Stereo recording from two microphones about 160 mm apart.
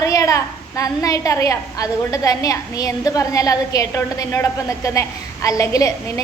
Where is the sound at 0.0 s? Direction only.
20° left (ahead or behind).